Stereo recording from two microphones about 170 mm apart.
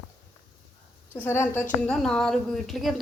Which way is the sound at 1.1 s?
15° left (ahead or behind).